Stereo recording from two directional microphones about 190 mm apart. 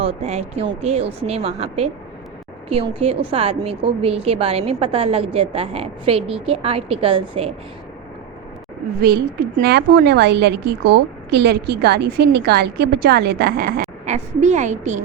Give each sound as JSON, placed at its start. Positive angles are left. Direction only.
{"t": 0.0, "sound": "a woman's voice", "side_deg": -30}
{"t": 9.0, "sound": "a woman's voice", "side_deg": -55}
{"t": 14.0, "sound": "a woman's voice", "side_deg": -40}